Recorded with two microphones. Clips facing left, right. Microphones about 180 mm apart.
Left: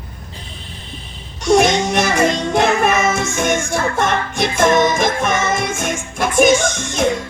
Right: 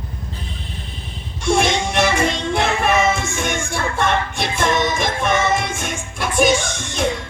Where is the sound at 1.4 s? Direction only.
40° left (ahead or behind).